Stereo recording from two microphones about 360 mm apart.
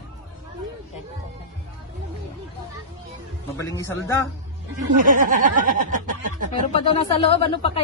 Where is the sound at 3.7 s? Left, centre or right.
Centre.